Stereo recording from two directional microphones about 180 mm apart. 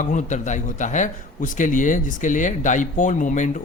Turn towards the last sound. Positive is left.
turn(degrees=45)  # may be behind; listen again after turning